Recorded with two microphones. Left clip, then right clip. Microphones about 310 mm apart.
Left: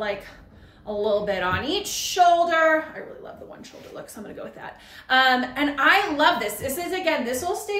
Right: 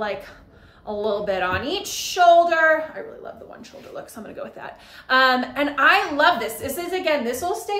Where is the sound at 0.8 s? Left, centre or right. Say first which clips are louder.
Even; centre.